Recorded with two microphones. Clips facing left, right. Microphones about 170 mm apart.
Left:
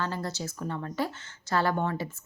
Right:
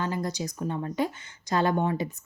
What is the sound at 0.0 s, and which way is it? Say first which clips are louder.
Speech: right 3 dB; 15° right (ahead or behind).